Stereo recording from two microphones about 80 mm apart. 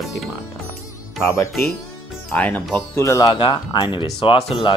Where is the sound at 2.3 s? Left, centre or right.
Centre.